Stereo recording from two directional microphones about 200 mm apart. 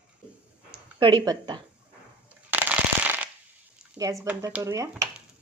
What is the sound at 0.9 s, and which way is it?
Speech, 25° right (ahead or behind).